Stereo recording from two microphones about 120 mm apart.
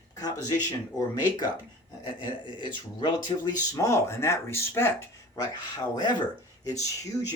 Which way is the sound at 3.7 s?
25° left (ahead or behind).